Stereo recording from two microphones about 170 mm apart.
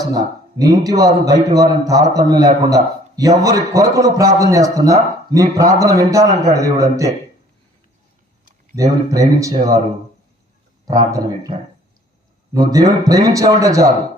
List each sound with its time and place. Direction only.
0.0 s a man's voice: 20° right (ahead or behind)
8.7 s a man's voice: 20° right (ahead or behind)
10.8 s a man's voice: 20° right (ahead or behind)
12.5 s a man's voice: 20° right (ahead or behind)